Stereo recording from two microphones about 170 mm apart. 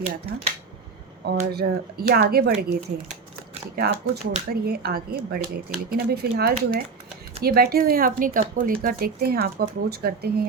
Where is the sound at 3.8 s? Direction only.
75° right (ahead or behind).